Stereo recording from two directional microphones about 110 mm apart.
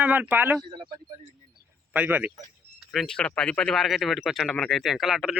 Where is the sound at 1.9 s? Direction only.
15° right (ahead or behind).